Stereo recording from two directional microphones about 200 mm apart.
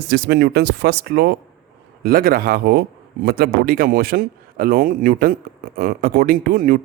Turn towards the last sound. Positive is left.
turn(degrees=-45)  # may be behind; listen again after turning